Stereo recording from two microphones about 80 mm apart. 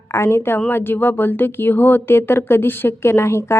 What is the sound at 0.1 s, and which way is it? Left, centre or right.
Speech, left.